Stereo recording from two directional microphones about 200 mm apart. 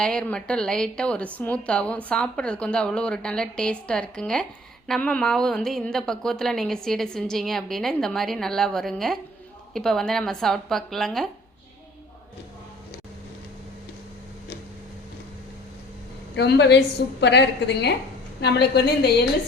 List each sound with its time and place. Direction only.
0.0 s a woman's voice: 5° left (ahead or behind)
16.3 s a woman's voice: 60° left (ahead or behind)